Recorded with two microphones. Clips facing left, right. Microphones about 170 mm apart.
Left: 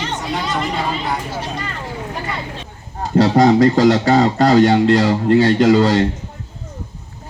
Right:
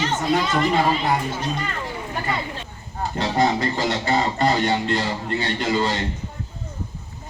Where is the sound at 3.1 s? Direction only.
90° left.